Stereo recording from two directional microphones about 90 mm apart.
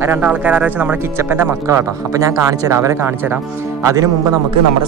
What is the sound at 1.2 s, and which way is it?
Speech, 25° right (ahead or behind).